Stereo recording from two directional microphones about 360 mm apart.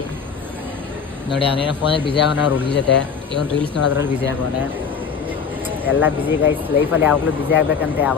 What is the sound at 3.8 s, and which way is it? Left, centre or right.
Speech, left.